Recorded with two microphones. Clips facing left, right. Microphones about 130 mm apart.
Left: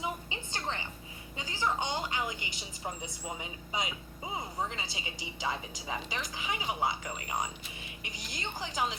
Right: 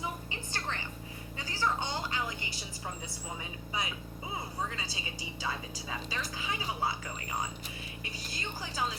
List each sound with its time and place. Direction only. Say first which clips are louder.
0.0 s music: left 2 dB; 20° left (ahead or behind)
1.4 s a woman's voice: even; 15° left (ahead or behind)